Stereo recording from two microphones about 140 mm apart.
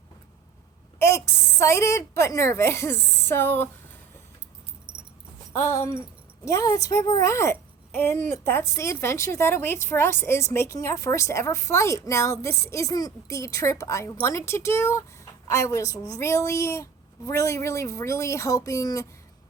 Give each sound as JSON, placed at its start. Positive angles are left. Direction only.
{"t": 0.9, "sound": "a woman's voice", "side_deg": 20}
{"t": 4.9, "sound": "a sound", "side_deg": -10}
{"t": 5.5, "sound": "a woman's voice", "side_deg": 20}